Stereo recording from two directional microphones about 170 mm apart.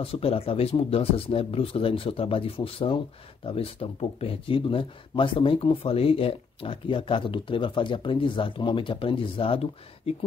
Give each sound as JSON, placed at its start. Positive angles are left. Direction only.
{"t": 0.0, "sound": "speech", "side_deg": 35}